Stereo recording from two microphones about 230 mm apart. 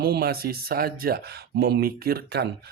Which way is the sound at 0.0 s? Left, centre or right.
Right.